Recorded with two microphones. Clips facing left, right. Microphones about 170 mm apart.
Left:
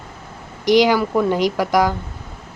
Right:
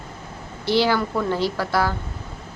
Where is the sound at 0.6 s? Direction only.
15° left (ahead or behind).